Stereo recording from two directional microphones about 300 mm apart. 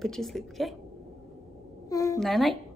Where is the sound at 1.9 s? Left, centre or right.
Centre.